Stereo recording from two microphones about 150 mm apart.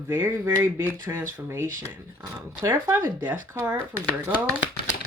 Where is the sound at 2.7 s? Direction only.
25° right (ahead or behind).